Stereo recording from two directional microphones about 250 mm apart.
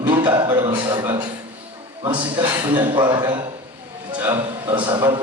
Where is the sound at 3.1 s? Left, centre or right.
Centre.